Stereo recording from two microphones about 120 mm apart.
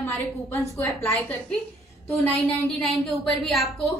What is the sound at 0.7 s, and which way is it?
Speech, 25° left (ahead or behind).